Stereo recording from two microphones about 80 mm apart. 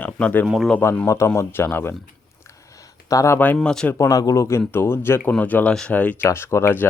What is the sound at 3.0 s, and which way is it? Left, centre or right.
Speech, left.